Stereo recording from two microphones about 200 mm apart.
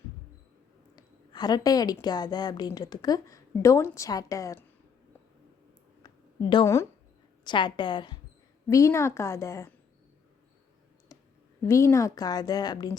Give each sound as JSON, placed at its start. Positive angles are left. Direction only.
{"t": 0.9, "sound": "a woman's voice", "side_deg": 20}
{"t": 6.0, "sound": "a sound", "side_deg": 20}
{"t": 7.4, "sound": "a woman's voice", "side_deg": 25}
{"t": 11.1, "sound": "clicking", "side_deg": 15}
{"t": 11.6, "sound": "a woman's voice", "side_deg": 15}